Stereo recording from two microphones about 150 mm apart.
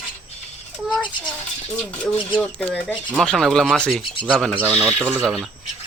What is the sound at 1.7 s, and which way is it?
Speech, 10° left (ahead or behind).